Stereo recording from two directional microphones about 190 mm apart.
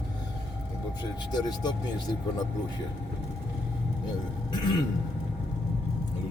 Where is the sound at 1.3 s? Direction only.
20° left (ahead or behind).